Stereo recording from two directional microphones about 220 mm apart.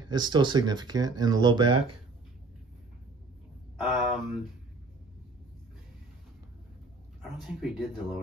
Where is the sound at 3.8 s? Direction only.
Centre (ahead or behind).